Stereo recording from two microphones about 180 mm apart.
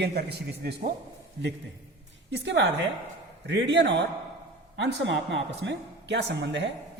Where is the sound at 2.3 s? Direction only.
80° right.